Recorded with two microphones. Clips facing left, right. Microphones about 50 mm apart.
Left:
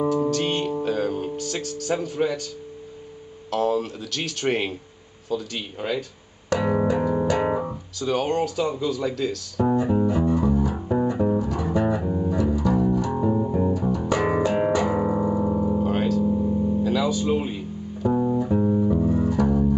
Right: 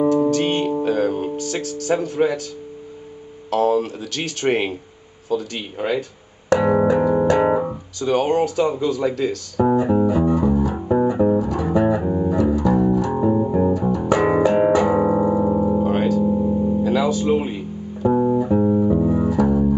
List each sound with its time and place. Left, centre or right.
0.1 s music: centre
1.3 s speech: centre
3.4 s speech: centre
6.6 s music: centre
8.7 s speech: centre
9.7 s music: centre
11.3 s music: centre
12.3 s music: centre
16.3 s music: centre